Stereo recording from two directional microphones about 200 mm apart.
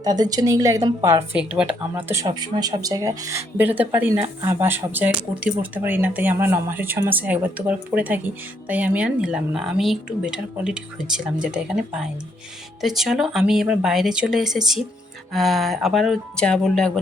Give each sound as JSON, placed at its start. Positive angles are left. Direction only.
{"t": 0.0, "sound": "speech", "side_deg": -20}
{"t": 2.2, "sound": "speech", "side_deg": -20}